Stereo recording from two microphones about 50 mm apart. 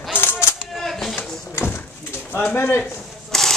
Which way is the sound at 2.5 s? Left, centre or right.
Left.